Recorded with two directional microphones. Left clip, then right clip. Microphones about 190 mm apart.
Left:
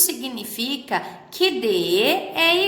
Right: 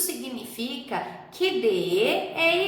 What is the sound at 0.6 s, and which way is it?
A woman's voice, 50° left (ahead or behind).